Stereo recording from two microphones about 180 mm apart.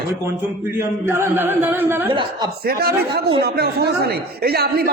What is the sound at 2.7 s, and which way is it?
A man's voice, 60° right (ahead or behind).